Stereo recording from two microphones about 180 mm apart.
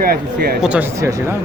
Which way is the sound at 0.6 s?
10° right (ahead or behind).